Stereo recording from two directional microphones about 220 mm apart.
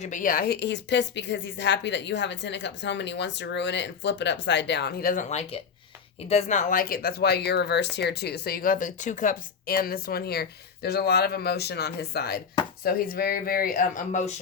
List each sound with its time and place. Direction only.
0.0 s speech: 35° left (ahead or behind)